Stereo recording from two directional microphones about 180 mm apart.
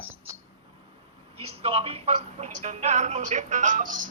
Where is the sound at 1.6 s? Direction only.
30° right (ahead or behind).